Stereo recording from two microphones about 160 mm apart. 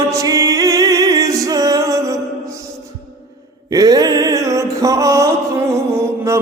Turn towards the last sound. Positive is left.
turn(degrees=-15)  # may be behind; listen again after turning